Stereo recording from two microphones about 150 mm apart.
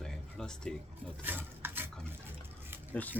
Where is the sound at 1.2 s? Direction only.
15° right (ahead or behind).